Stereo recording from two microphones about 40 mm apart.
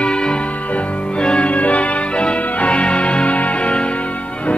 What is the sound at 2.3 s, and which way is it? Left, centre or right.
Music, left.